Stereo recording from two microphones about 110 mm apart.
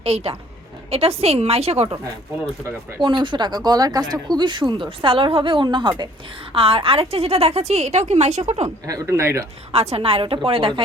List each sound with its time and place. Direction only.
0.0 s a woman's voice: 65° right (ahead or behind)
3.0 s a woman's voice: 45° right (ahead or behind); by 8.6 s 90° right
8.6 s speech: 30° right (ahead or behind)
9.7 s a woman's voice: 65° right (ahead or behind)